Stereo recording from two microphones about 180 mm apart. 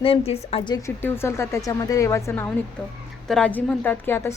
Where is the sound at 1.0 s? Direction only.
15° left (ahead or behind).